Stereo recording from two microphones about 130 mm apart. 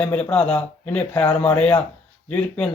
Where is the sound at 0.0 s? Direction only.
10° left (ahead or behind).